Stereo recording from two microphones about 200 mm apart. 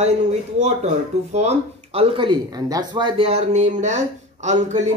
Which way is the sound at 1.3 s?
35° right (ahead or behind).